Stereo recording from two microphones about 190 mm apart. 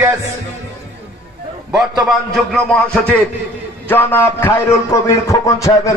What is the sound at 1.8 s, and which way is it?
A man's voice, centre (ahead or behind).